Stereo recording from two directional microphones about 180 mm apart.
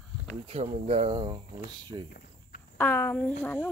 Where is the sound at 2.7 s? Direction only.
10° left (ahead or behind).